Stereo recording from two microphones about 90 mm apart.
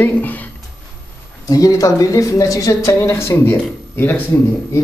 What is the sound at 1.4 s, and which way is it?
A woman's voice, 40° left (ahead or behind).